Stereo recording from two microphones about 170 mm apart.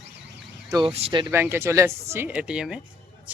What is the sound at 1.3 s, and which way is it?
Speech, 15° right (ahead or behind).